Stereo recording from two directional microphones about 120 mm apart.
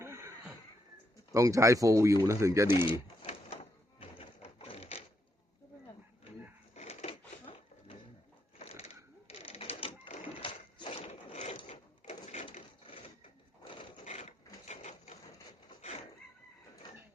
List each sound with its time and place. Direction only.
0.0 s a sound: 25° right (ahead or behind)
1.3 s speech: 25° right (ahead or behind)
2.6 s speech: 40° left (ahead or behind)
4.0 s a sound: 55° left (ahead or behind)
6.7 s a sound: 60° left (ahead or behind)
9.2 s cash register: 55° left (ahead or behind)
10.8 s ratchet: 60° left (ahead or behind)
11.7 s printer: 65° left (ahead or behind)
12.8 s sewing machine: 50° left (ahead or behind)
14.0 s printer: 70° left (ahead or behind)